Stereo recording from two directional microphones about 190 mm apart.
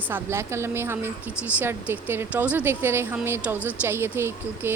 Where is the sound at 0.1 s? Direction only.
15° right (ahead or behind).